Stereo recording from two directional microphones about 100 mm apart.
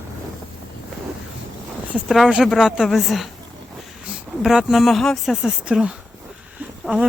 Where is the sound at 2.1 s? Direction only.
5° right (ahead or behind).